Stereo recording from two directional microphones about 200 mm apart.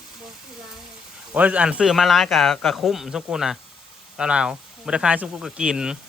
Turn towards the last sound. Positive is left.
turn(degrees=-5)  # may be behind; listen again after turning